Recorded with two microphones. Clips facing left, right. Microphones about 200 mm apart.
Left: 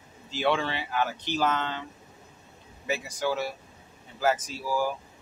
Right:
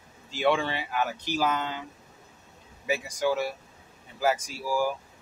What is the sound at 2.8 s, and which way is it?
Speech, 15° right (ahead or behind).